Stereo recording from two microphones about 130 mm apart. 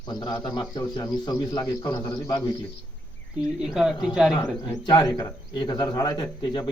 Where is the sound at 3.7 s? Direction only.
5° right (ahead or behind).